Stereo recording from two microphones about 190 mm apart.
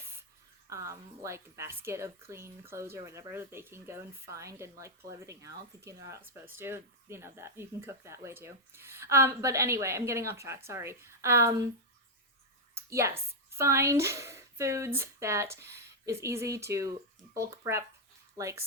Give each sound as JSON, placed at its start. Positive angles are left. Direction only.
{"t": 0.7, "sound": "a woman's voice", "side_deg": -15}
{"t": 12.7, "sound": "a woman's voice", "side_deg": -15}